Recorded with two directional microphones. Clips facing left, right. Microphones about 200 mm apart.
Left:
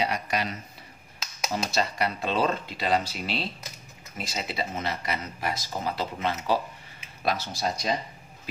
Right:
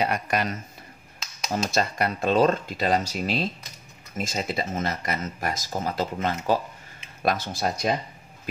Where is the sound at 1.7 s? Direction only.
50° right (ahead or behind).